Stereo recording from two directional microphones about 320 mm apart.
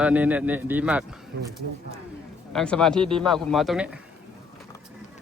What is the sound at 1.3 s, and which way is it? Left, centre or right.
Speech, right.